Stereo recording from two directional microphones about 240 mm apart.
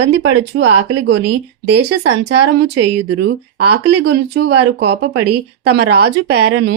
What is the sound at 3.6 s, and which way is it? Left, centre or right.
Speech, right.